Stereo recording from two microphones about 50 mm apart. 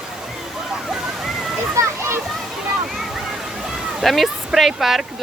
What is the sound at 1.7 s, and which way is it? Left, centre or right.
Splash, right.